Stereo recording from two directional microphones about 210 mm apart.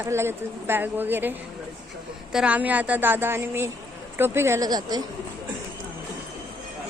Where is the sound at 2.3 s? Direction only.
5° right (ahead or behind).